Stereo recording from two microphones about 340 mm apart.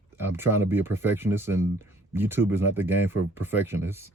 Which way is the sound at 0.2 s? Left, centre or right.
Centre.